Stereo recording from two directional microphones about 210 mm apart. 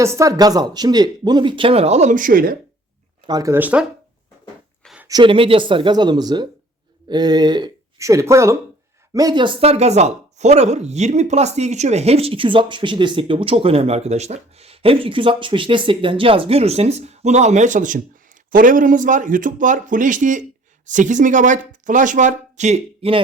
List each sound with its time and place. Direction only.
0.0 s speech: 15° right (ahead or behind); by 2.6 s 45° right (ahead or behind)
3.2 s speech: 15° right (ahead or behind)
4.8 s a sound: centre (ahead or behind)
5.0 s speech: 20° right (ahead or behind)